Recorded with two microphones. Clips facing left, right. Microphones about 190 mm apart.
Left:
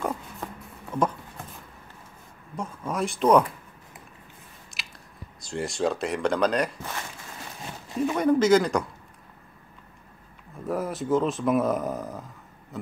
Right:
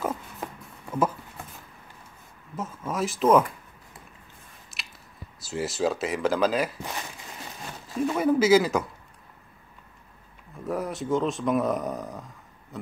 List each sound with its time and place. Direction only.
0.0 s a sound: 5° right (ahead or behind)
2.5 s a sound: 5° right (ahead or behind)
4.8 s chewing: centre (ahead or behind)
5.4 s speech: 5° right (ahead or behind)
7.9 s speech: 5° right (ahead or behind)
10.5 s speech: centre (ahead or behind)